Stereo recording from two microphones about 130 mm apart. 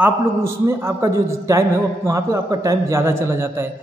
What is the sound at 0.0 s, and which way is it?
A man's voice, 20° right (ahead or behind).